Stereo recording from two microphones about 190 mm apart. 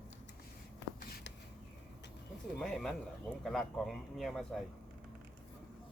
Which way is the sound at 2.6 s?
Centre (ahead or behind).